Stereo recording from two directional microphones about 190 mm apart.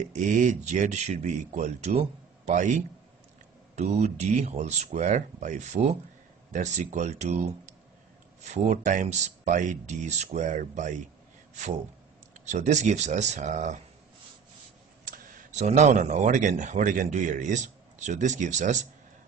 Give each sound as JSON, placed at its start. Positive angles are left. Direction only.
{"t": 0.1, "sound": "speech", "side_deg": -40}
{"t": 12.4, "sound": "speech", "side_deg": -40}
{"t": 15.0, "sound": "speech", "side_deg": -40}